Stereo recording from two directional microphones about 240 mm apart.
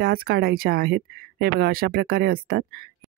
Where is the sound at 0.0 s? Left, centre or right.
Right.